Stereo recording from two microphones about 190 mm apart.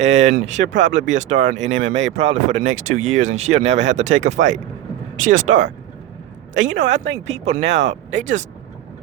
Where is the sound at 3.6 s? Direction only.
75° right (ahead or behind).